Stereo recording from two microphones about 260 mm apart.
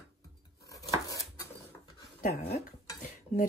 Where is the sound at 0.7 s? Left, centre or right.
Centre.